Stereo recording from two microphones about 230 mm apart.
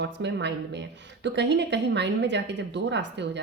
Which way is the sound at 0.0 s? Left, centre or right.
Right.